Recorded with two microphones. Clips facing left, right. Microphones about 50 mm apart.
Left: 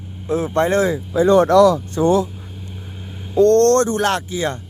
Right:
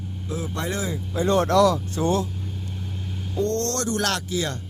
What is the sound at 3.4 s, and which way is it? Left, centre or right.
Speech, left.